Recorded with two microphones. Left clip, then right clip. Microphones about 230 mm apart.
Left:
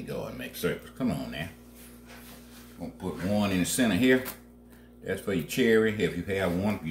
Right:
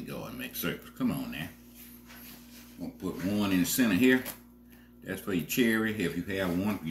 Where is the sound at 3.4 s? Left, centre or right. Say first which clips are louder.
Even; left.